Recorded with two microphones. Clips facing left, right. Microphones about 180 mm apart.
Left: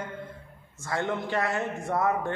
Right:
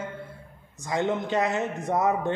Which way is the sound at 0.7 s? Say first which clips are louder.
Right 3 dB; 15° right (ahead or behind).